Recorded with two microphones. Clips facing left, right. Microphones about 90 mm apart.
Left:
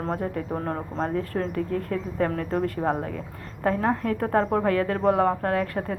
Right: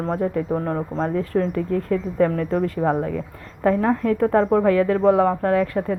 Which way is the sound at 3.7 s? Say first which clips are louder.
Right 4 dB; 15° left (ahead or behind).